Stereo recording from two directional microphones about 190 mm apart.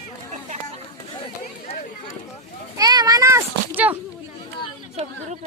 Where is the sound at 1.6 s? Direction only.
35° left (ahead or behind).